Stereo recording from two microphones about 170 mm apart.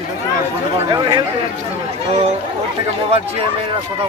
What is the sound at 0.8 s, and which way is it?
Speech, 25° right (ahead or behind).